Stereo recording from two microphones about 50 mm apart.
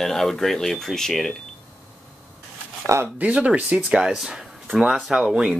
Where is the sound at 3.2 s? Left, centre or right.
Right.